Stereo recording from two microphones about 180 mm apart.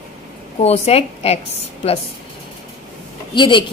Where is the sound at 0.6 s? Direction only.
35° left (ahead or behind).